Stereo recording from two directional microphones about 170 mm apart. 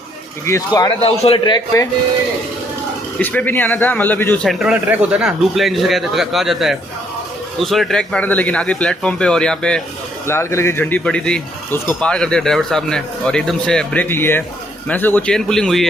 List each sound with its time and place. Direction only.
0.4 s a man's voice: 20° left (ahead or behind)
3.2 s a man's voice: 10° left (ahead or behind)
4.4 s speech: 5° right (ahead or behind)
10.2 s speech: 15° left (ahead or behind)